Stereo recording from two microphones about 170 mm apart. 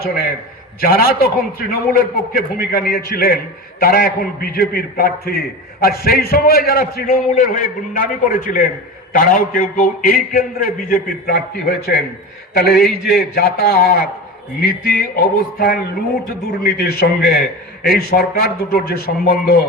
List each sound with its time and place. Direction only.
0.0 s a man's voice: 60° left (ahead or behind)